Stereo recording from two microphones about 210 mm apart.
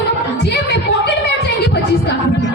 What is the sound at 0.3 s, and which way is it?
Singing, 55° left (ahead or behind).